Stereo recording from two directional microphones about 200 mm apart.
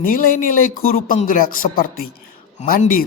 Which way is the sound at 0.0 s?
45° left (ahead or behind).